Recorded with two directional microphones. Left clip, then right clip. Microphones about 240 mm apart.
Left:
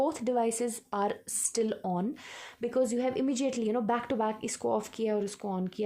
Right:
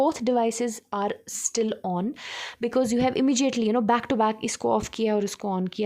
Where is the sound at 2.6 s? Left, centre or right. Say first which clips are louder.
Right 5 dB; right.